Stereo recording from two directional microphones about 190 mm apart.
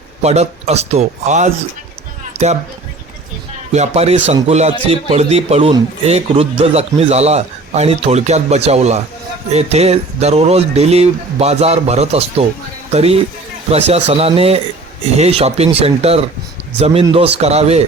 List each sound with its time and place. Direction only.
0.2 s a man's voice: 35° right (ahead or behind)
3.7 s a man's voice: 35° right (ahead or behind)